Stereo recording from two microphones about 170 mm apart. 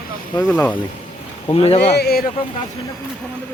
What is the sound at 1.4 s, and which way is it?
Speech, 35° left (ahead or behind).